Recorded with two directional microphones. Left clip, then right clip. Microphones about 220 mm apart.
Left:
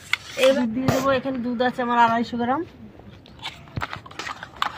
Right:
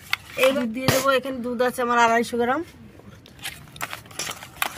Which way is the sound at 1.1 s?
60° right (ahead or behind).